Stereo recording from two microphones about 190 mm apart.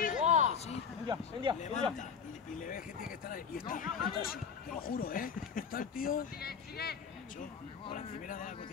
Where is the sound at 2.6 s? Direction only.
45° left (ahead or behind).